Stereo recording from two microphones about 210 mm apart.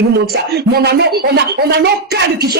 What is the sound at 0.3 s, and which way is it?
Speech, 50° right (ahead or behind).